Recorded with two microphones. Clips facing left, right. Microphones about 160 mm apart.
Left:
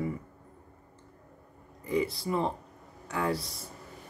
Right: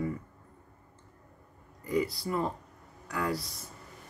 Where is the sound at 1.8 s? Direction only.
25° left (ahead or behind).